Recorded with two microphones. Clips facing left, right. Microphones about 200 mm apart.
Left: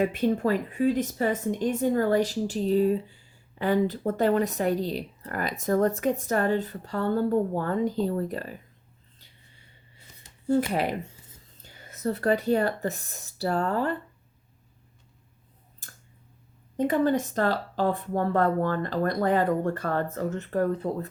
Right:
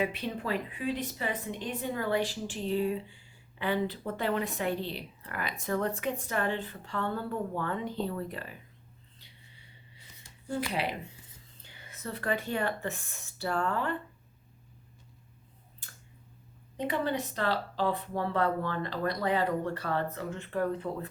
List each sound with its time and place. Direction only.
0.0 s a woman's voice: 45° left (ahead or behind)
10.6 s a woman's voice: 45° left (ahead or behind)
15.8 s tick: 45° left (ahead or behind)
16.7 s a woman's voice: 45° left (ahead or behind)